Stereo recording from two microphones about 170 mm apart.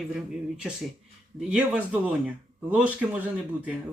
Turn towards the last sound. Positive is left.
turn(degrees=-10)  # may be behind; listen again after turning